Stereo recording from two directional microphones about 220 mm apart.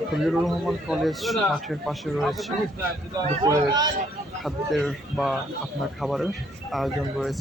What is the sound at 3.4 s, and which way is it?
Speech, 20° right (ahead or behind).